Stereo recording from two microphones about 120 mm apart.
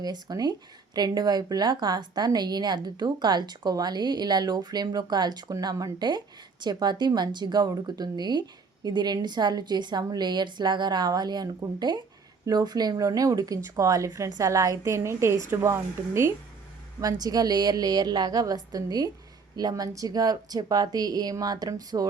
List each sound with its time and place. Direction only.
0.0 s a woman's voice: 35° right (ahead or behind)